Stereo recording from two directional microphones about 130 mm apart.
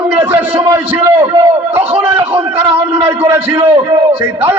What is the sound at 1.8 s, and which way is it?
A man's voice, 15° right (ahead or behind).